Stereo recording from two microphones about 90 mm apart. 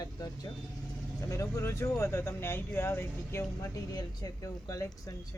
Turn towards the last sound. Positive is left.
turn(degrees=40)  # may be behind; listen again after turning